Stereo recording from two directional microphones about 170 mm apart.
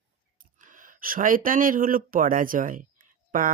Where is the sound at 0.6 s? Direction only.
50° right (ahead or behind).